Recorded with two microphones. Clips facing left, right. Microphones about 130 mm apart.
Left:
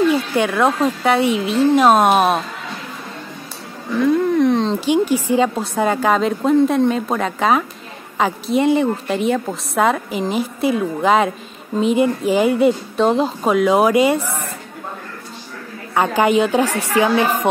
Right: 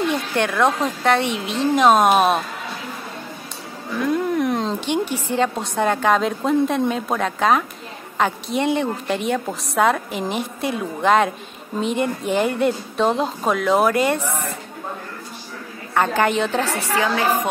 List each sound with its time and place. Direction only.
0.1 s a woman's voice: 5° left (ahead or behind)
4.0 s a sound: centre (ahead or behind)
4.7 s a woman's voice: 5° left (ahead or behind)
15.9 s a woman's voice: 10° left (ahead or behind)